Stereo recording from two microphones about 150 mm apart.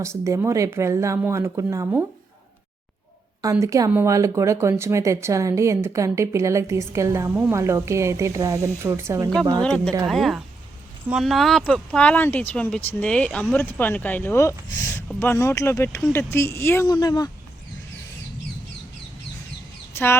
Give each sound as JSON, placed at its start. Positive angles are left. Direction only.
{"t": 0.0, "sound": "speech", "side_deg": -20}
{"t": 3.6, "sound": "speech", "side_deg": -20}
{"t": 9.6, "sound": "speech", "side_deg": 5}
{"t": 16.8, "sound": "speech", "side_deg": 25}
{"t": 19.9, "sound": "speech", "side_deg": 15}